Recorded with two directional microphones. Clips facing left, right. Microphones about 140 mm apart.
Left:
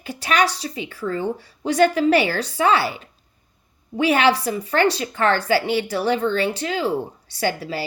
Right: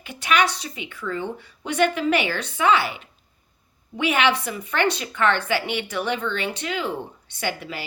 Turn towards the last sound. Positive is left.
turn(degrees=35)  # may be behind; listen again after turning